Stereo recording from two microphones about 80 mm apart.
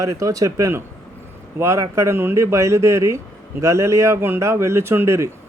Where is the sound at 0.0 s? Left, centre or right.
Right.